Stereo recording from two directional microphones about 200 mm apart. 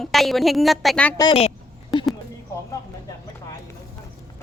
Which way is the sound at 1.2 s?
25° left (ahead or behind).